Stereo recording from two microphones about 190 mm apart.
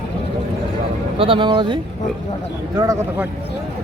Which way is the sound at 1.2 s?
25° right (ahead or behind).